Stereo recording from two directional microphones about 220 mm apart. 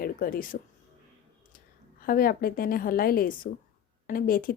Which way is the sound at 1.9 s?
40° left (ahead or behind).